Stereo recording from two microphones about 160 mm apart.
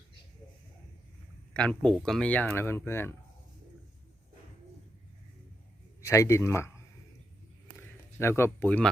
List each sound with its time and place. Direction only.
1.5 s speech: 5° left (ahead or behind)
6.0 s speech: 20° left (ahead or behind)